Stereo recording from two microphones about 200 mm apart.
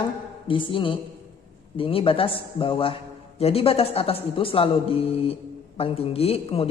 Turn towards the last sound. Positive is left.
turn(degrees=30)  # may be behind; listen again after turning